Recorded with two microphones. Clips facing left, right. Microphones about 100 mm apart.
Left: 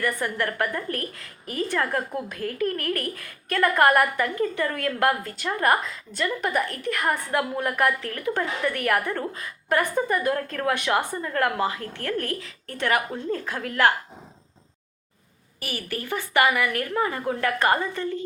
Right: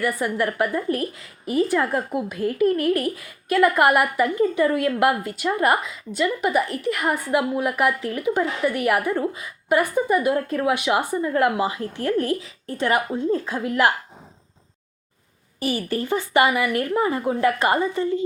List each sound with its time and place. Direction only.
0.0 s speech: 15° right (ahead or behind)
15.6 s a woman's voice: 25° right (ahead or behind)